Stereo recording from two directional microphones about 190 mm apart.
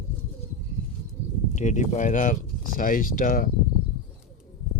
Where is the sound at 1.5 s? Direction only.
40° left (ahead or behind).